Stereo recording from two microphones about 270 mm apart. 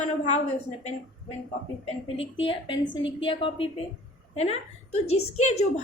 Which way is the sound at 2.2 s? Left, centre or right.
Centre.